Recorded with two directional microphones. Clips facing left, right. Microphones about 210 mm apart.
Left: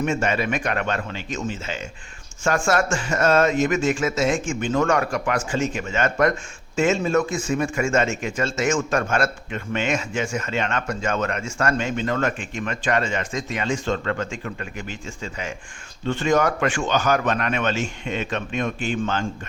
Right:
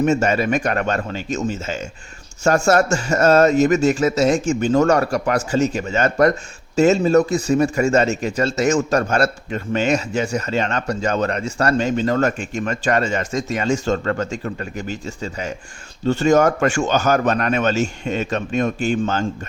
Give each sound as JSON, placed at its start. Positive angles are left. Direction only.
{"t": 0.0, "sound": "speech", "side_deg": -40}